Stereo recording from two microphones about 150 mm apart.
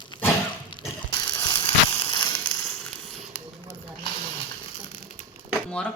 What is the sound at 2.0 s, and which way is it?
Crushing, 30° left (ahead or behind).